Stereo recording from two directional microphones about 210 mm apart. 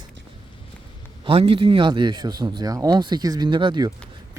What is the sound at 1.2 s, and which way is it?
Speech, 25° right (ahead or behind).